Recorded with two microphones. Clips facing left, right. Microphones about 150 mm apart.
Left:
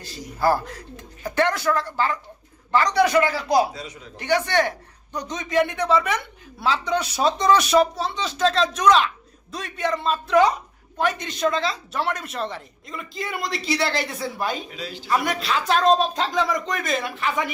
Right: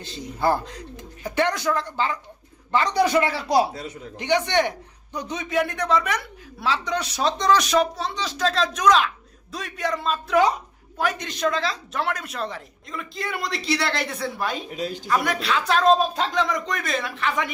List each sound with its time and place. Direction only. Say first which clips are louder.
0.0 s speech: left 1 dB; 20° right (ahead or behind)
4.2 s speech: even; 15° right (ahead or behind)
5.3 s speech: left 3 dB; 5° right (ahead or behind)
14.7 s a man's voice: right 5 dB; 45° right (ahead or behind)
15.1 s speech: left 1 dB; centre (ahead or behind)